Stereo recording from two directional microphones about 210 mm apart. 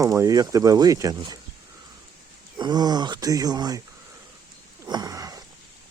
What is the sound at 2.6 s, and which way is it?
Speech, 20° right (ahead or behind).